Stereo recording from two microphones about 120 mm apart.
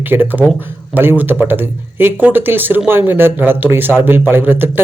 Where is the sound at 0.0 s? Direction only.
15° right (ahead or behind).